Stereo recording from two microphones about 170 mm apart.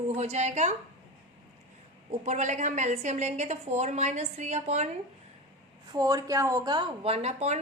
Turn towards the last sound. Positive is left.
turn(degrees=-40)  # may be behind; listen again after turning